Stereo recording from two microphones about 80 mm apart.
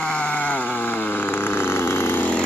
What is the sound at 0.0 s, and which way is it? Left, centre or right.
Sheep, centre.